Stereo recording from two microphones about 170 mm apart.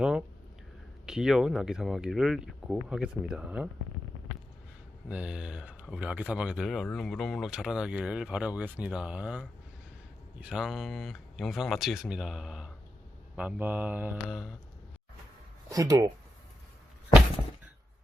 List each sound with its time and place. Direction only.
0.0 s a sound: 5° right (ahead or behind)
1.0 s speech: 5° right (ahead or behind)
5.0 s speech: 5° right (ahead or behind)
10.5 s speech: 5° right (ahead or behind)
15.7 s speech: 20° right (ahead or behind)